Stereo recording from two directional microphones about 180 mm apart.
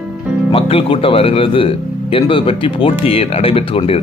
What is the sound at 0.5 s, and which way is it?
Speech, 30° left (ahead or behind).